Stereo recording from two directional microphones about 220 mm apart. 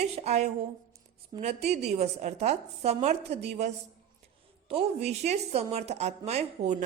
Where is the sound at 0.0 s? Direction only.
30° right (ahead or behind).